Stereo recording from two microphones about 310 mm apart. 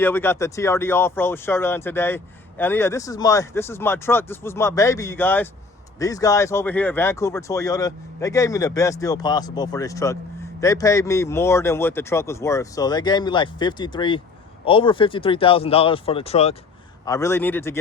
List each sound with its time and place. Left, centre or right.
0.0 s speech: centre
17.1 s speech: centre